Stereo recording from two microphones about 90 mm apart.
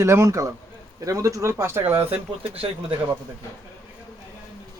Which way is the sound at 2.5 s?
90° right.